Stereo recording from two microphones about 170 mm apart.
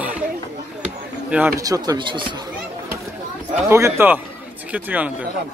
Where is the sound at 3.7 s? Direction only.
15° right (ahead or behind).